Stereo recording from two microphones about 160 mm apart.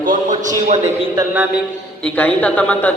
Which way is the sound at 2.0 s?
10° left (ahead or behind).